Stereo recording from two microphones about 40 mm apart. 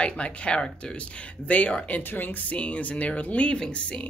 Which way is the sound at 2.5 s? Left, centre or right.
Left.